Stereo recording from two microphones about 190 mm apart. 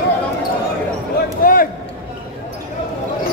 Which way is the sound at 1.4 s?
45° left (ahead or behind).